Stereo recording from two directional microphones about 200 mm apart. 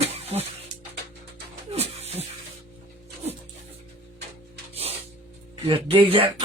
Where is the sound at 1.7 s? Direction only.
30° right (ahead or behind).